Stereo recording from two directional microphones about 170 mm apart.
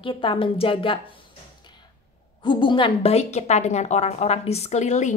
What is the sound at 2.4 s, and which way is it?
A woman's voice, 30° left (ahead or behind).